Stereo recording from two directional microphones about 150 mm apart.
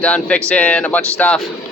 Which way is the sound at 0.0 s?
10° left (ahead or behind).